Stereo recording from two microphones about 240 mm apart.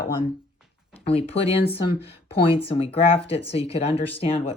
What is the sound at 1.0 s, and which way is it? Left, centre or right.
Speech, left.